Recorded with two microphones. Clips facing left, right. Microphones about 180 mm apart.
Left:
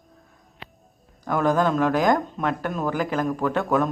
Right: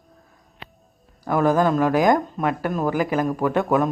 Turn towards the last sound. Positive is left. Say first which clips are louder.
# right 2 dB
turn(degrees=-5)  # may be behind; listen again after turning